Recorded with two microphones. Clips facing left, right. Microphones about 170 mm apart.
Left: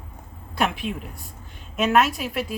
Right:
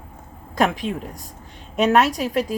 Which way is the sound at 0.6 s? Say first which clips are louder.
Right 4 dB; 40° right (ahead or behind).